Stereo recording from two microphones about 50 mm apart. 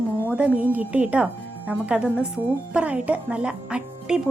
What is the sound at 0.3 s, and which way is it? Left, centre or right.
Speech, right.